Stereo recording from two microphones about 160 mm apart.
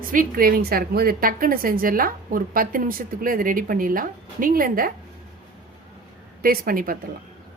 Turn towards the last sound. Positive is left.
turn(degrees=-65)  # may be behind; listen again after turning